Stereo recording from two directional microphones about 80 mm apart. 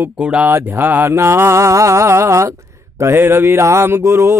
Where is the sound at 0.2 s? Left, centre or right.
Centre.